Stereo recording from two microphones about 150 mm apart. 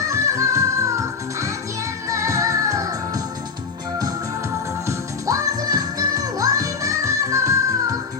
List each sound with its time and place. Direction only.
0.1 s music: 20° right (ahead or behind)
4.9 s music: 20° right (ahead or behind)